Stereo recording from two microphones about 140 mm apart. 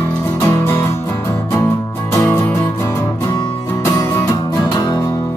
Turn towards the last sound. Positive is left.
turn(degrees=15)  # may be behind; listen again after turning